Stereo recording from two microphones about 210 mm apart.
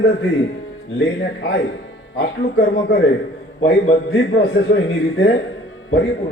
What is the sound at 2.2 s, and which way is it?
Speech, 50° left (ahead or behind).